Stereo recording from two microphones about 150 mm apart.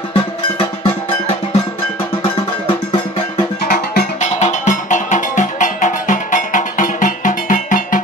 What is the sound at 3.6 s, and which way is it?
Music, 90° left.